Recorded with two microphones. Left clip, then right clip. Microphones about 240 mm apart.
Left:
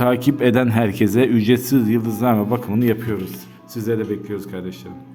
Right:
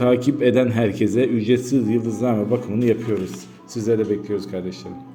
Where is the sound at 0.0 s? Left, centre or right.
Left.